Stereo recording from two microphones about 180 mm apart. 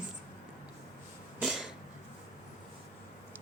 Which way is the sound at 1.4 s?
5° right (ahead or behind).